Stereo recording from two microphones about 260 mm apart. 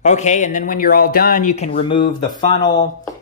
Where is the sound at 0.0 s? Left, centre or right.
Left.